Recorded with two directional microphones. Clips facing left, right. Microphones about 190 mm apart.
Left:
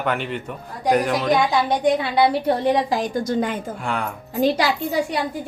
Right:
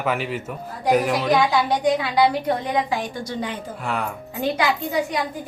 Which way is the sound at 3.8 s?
Centre (ahead or behind).